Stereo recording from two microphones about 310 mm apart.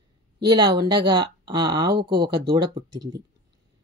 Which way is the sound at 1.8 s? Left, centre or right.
Right.